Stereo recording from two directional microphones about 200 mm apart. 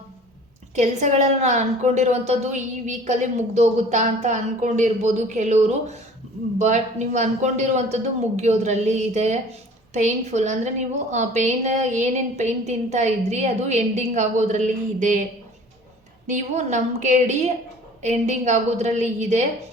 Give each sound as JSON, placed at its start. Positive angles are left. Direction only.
{"t": 0.8, "sound": "a woman's voice", "side_deg": -35}
{"t": 16.2, "sound": "a woman's voice", "side_deg": -35}